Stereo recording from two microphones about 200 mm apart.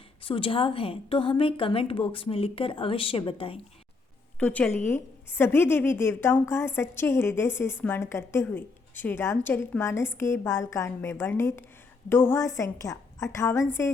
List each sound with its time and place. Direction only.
0.2 s a woman's voice: 25° left (ahead or behind)
4.4 s a woman's voice: 5° left (ahead or behind)